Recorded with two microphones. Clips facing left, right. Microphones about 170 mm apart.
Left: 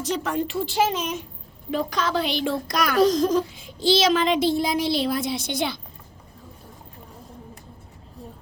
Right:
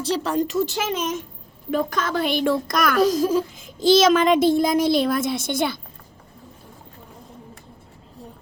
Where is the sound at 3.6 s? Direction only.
45° right (ahead or behind).